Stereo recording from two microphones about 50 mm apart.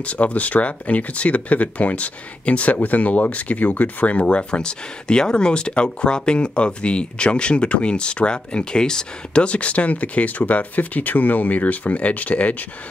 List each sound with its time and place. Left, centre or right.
0.0 s speech: left